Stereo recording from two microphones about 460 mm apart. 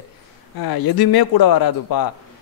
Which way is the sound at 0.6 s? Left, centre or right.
Left.